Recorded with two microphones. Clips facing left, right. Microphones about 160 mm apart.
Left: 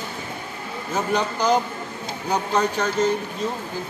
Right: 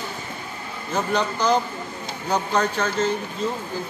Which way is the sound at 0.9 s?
10° left (ahead or behind).